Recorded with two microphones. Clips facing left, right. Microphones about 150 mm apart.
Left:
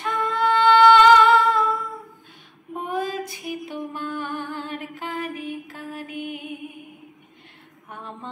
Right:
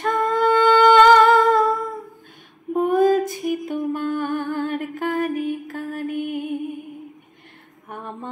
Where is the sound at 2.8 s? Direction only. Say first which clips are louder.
Right 10 dB; 45° right (ahead or behind).